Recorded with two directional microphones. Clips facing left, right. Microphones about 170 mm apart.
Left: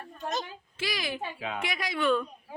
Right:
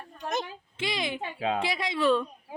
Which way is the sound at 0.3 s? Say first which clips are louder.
Right 2 dB; 25° right (ahead or behind).